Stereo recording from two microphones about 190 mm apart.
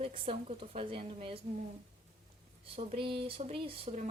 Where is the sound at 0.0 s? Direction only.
30° right (ahead or behind).